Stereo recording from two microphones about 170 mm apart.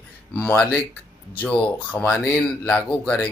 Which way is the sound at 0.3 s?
5° left (ahead or behind).